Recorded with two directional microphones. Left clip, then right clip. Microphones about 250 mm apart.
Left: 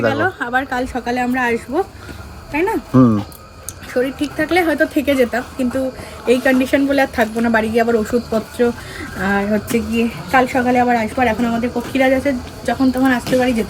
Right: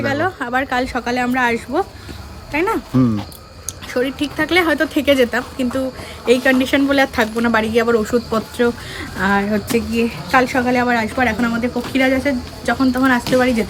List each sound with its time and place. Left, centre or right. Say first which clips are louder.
0.1 s speech: left 1 dB; right
0.9 s speech: right 1 dB; centre